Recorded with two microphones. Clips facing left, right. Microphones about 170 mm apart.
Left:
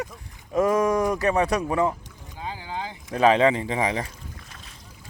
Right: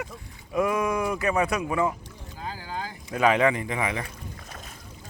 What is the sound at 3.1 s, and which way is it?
Speech, 30° left (ahead or behind).